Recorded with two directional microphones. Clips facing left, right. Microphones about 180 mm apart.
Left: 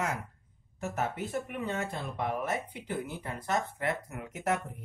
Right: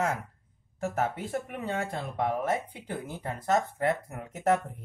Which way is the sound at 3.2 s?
45° right (ahead or behind).